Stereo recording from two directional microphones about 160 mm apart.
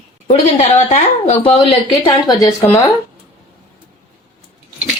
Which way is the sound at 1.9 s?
25° left (ahead or behind).